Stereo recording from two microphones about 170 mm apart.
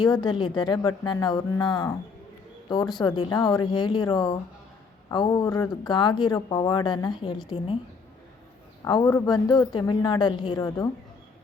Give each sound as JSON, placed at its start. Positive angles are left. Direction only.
{"t": 0.0, "sound": "speech", "side_deg": 25}
{"t": 8.8, "sound": "speech", "side_deg": 20}